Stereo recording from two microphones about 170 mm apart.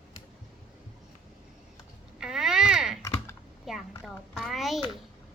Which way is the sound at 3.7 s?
Centre (ahead or behind).